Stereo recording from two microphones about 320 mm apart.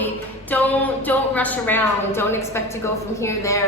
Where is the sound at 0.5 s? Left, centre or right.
Centre.